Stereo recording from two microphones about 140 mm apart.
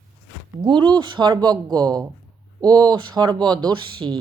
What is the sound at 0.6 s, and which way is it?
A woman's voice, 35° right (ahead or behind).